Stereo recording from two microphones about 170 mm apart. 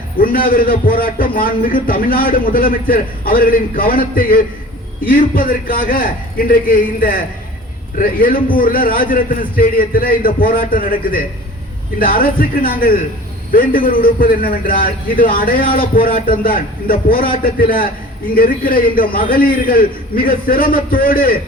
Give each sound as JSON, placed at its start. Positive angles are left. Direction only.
{"t": 0.2, "sound": "a man's voice", "side_deg": 55}